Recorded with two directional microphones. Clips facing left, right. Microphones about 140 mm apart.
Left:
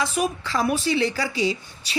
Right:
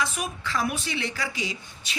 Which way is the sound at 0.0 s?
30° left (ahead or behind).